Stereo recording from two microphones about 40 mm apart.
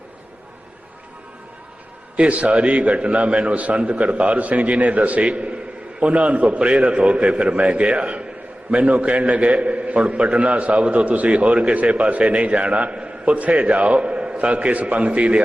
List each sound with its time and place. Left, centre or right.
2.1 s a man's voice: right